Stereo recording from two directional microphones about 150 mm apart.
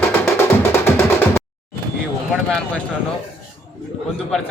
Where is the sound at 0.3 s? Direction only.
15° left (ahead or behind).